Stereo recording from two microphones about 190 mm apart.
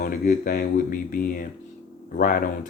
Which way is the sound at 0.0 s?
50° left (ahead or behind).